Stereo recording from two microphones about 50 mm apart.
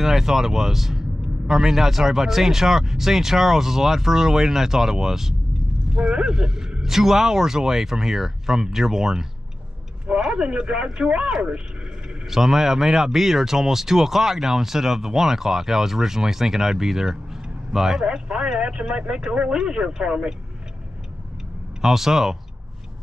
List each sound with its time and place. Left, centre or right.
0.0 s speech: centre; by 11.3 s right
12.3 s speech: centre
18.0 s speech: centre
21.8 s speech: centre